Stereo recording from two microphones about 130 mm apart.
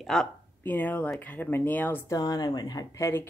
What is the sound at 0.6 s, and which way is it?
Speech, 15° left (ahead or behind).